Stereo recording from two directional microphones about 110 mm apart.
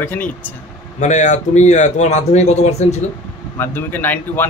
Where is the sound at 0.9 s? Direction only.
90° left.